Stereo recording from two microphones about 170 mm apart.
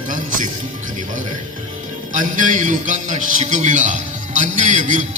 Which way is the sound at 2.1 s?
50° right (ahead or behind).